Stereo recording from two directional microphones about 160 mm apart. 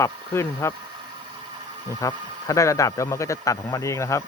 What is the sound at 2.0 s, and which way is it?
Speech, 20° left (ahead or behind).